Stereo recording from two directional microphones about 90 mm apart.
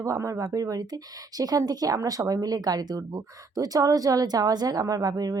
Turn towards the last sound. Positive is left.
turn(degrees=-45)  # may be behind; listen again after turning